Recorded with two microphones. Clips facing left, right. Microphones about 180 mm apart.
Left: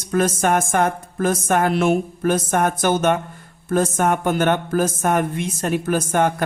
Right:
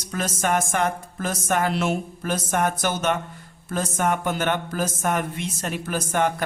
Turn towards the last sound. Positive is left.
turn(degrees=50)  # may be behind; listen again after turning